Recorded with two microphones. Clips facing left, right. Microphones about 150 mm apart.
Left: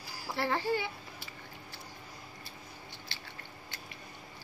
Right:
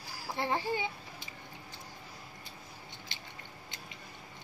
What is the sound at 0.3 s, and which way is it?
A child's voice, 20° right (ahead or behind).